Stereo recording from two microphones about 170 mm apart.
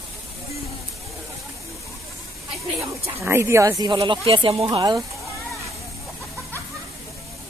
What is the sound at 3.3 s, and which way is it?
Speech, 15° right (ahead or behind).